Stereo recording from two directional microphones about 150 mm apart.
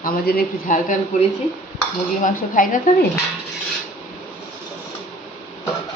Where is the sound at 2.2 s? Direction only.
60° left (ahead or behind).